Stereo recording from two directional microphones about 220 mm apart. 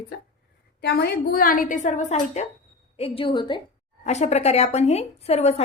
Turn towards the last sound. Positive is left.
turn(degrees=30)  # may be behind; listen again after turning